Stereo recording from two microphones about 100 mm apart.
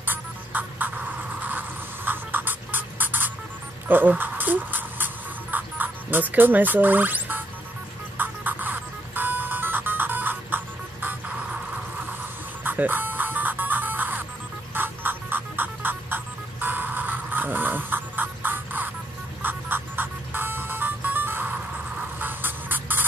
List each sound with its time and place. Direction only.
0.0 s music: 20° right (ahead or behind)
2.0 s music: 20° right (ahead or behind)
3.9 s a sound: 20° right (ahead or behind)
8.2 s music: 20° right (ahead or behind)
12.6 s music: 20° right (ahead or behind)
22.2 s a sound: 20° right (ahead or behind)